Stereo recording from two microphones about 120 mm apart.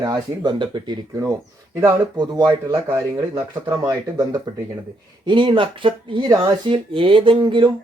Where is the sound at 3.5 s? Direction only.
35° right (ahead or behind).